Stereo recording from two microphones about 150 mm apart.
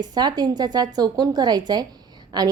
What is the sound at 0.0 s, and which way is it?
A woman's voice, 25° right (ahead or behind).